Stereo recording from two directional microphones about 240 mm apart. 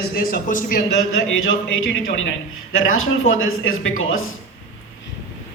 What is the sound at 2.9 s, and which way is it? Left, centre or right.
Speech, left.